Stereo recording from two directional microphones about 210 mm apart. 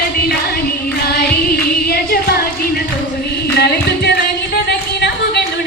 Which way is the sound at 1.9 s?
50° left (ahead or behind).